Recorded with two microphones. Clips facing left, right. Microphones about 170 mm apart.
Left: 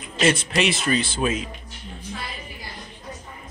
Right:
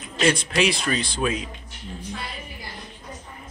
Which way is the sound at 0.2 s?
5° left (ahead or behind).